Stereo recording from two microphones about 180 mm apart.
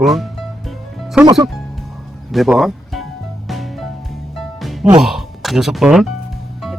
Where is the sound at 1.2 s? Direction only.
25° right (ahead or behind).